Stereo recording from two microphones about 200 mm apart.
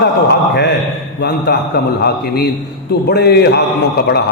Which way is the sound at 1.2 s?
55° left (ahead or behind).